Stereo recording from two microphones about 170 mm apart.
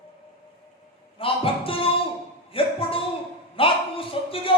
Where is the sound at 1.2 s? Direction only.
30° left (ahead or behind).